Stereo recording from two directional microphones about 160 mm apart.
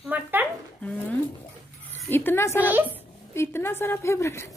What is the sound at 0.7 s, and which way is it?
Dishes, 10° left (ahead or behind).